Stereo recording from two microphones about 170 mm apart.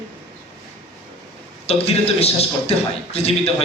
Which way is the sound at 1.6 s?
35° left (ahead or behind).